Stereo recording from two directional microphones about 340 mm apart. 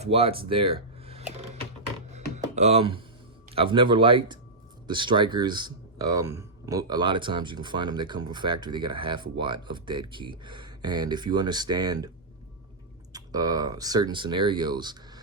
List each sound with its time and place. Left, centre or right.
0.0 s speech: centre
2.1 s a sound: centre
3.5 s speech: centre
13.1 s speech: centre